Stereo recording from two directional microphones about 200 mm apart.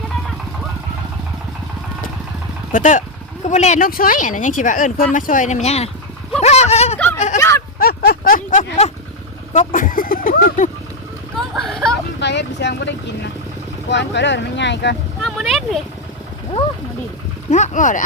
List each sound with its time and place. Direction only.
2.7 s speech: 40° left (ahead or behind)
6.4 s a sound: 35° left (ahead or behind)
7.3 s a sound: 15° left (ahead or behind)
7.8 s a sound: 50° left (ahead or behind)
9.5 s speech: 40° left (ahead or behind)
11.3 s hubbub: centre (ahead or behind)
12.2 s speech: 60° left (ahead or behind)
13.9 s speech: 60° left (ahead or behind)
15.2 s speech: centre (ahead or behind)
17.5 s speech: 40° left (ahead or behind)